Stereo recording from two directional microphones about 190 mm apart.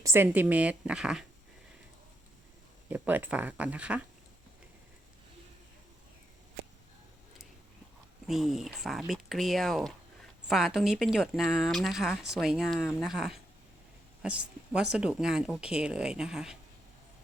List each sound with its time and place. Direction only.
0.0 s speech: 10° right (ahead or behind)
2.9 s speech: 10° right (ahead or behind)
8.3 s a woman's voice: centre (ahead or behind)